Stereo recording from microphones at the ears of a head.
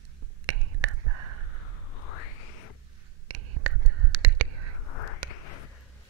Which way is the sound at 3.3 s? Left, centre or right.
Right.